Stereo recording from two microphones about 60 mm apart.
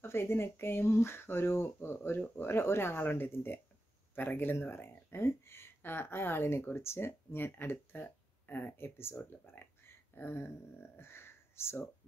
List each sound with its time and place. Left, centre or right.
0.0 s speech: left